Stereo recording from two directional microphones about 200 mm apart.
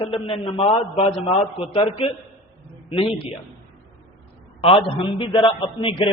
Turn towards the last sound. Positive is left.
turn(degrees=25)  # may be behind; listen again after turning